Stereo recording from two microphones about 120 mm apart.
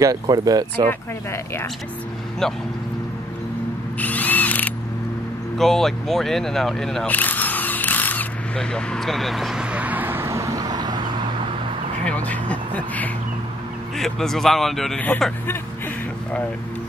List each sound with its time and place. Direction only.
0.0 s speech: 30° right (ahead or behind)
0.8 s speech: 20° left (ahead or behind)
2.4 s speech: 5° left (ahead or behind)
4.0 s ratchet: 15° left (ahead or behind)
5.6 s speech: 5° left (ahead or behind)
7.2 s single-lens reflex camera: 15° left (ahead or behind); by 11.0 s 35° right (ahead or behind)
12.0 s speech: 10° left (ahead or behind)